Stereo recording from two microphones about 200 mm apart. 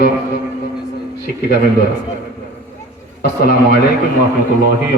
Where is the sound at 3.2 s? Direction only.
55° left (ahead or behind).